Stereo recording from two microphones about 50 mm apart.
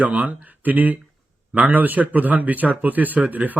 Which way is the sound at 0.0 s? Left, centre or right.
Right.